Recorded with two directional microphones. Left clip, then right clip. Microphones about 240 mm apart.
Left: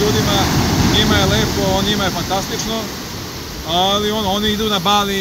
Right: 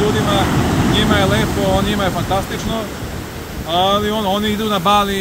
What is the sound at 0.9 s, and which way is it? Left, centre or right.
Speech, centre.